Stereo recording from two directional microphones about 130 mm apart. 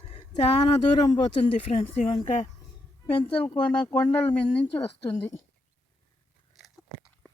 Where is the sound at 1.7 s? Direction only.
65° left (ahead or behind).